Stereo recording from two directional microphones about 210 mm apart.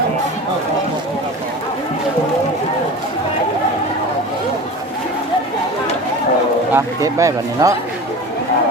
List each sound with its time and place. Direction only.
6.7 s speech: 15° right (ahead or behind)